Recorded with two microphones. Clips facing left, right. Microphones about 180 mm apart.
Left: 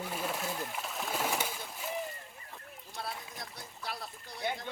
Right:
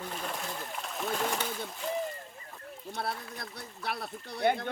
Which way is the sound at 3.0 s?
60° right (ahead or behind).